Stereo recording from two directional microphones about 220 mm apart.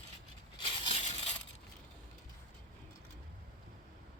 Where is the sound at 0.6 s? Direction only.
25° left (ahead or behind).